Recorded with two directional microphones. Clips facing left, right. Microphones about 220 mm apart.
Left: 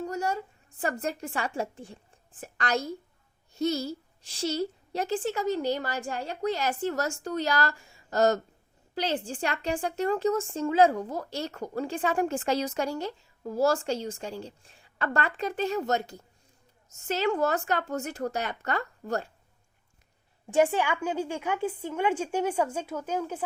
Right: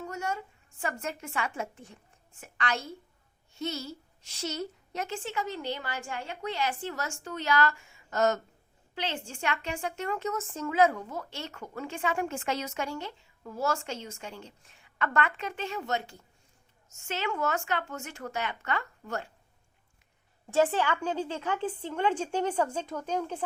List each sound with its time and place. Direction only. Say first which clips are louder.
0.0 s a woman's voice: left 5 dB; 35° left (ahead or behind)
20.5 s a woman's voice: left 2 dB; 15° left (ahead or behind)